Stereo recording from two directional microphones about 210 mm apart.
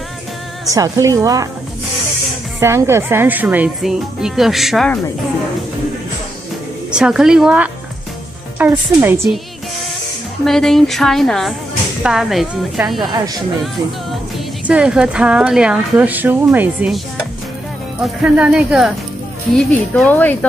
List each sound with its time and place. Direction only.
0.7 s a woman's voice: 15° right (ahead or behind)
2.6 s speech: 10° right (ahead or behind); by 5.0 s 5° left (ahead or behind)
6.9 s a woman's voice: 5° right (ahead or behind)
10.4 s speech: centre (ahead or behind)
13.0 s speech: 20° right (ahead or behind)
14.7 s speech: 5° right (ahead or behind)
18.0 s speech: 5° right (ahead or behind)